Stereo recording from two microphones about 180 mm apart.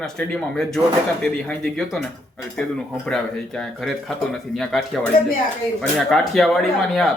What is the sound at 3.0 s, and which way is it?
Speech, 5° left (ahead or behind).